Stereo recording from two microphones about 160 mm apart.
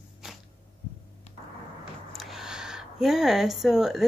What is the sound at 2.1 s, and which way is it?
Speech, centre (ahead or behind).